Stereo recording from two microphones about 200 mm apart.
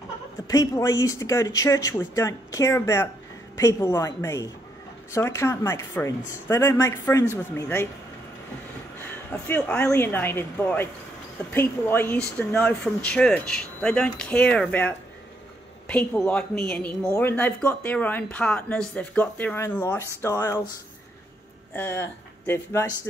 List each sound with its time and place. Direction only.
0.5 s speech: 15° left (ahead or behind)
9.3 s speech: 10° left (ahead or behind)
21.7 s speech: 10° left (ahead or behind)